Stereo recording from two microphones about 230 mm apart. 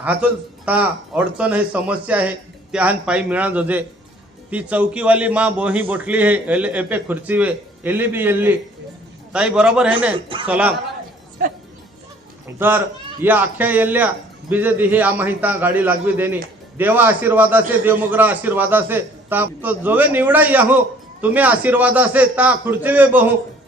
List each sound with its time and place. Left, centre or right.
0.0 s a man's voice: centre
10.2 s speech: right
10.4 s a man's voice: centre
11.4 s speech: right
12.5 s a man's voice: centre